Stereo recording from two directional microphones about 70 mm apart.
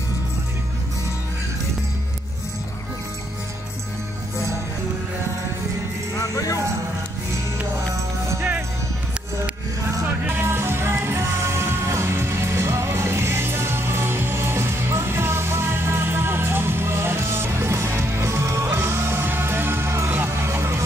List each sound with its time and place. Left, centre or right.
6.1 s music: left
8.4 s music: right
10.0 s music: right